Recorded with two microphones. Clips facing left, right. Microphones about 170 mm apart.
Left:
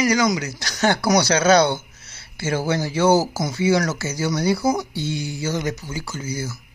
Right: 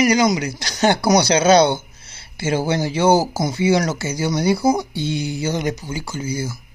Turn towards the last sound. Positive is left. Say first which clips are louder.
# right 3 dB
turn(degrees=-15)  # may be behind; listen again after turning